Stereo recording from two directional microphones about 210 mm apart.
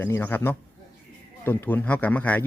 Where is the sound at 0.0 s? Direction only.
10° left (ahead or behind).